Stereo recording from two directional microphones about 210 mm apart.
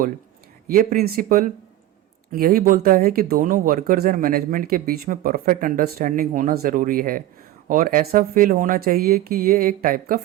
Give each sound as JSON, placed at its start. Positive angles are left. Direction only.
{"t": 0.7, "sound": "speech", "side_deg": -45}